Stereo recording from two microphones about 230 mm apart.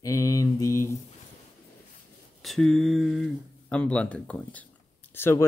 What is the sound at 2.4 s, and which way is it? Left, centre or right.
Speech, centre.